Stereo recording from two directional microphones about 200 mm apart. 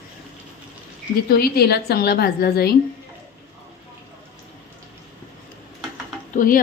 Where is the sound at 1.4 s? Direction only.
50° left (ahead or behind).